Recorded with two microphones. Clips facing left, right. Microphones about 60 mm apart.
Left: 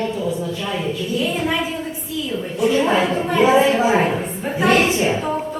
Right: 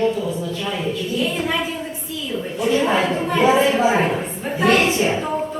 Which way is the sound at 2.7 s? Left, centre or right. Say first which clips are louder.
Even; centre.